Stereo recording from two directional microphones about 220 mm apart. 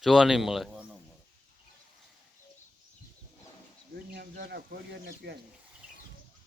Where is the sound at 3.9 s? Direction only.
45° right (ahead or behind).